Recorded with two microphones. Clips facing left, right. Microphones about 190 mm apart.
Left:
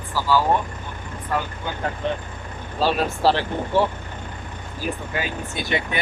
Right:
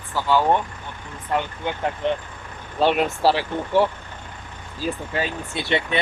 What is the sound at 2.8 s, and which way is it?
Speech, 20° right (ahead or behind).